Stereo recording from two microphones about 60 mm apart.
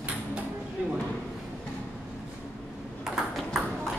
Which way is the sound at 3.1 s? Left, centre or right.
Centre.